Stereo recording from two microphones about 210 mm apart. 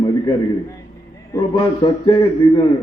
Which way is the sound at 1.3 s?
25° left (ahead or behind).